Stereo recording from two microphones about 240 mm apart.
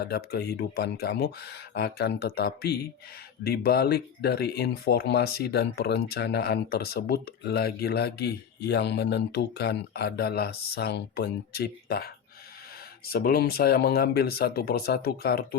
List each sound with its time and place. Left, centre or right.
0.0 s speech: left